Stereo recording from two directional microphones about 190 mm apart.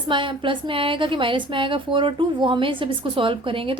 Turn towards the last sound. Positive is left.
turn(degrees=-25)  # may be behind; listen again after turning